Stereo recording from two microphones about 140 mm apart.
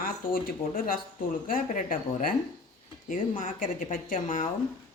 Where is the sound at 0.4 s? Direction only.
90° left.